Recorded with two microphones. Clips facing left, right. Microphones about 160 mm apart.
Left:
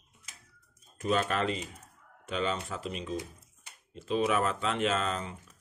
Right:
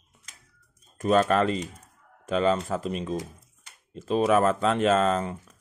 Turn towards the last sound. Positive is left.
turn(degrees=-50)  # may be behind; listen again after turning